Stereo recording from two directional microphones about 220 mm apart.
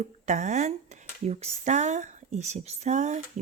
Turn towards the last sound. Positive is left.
turn(degrees=-30)  # may be behind; listen again after turning